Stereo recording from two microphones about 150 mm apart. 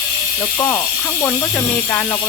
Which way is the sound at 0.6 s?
20° left (ahead or behind).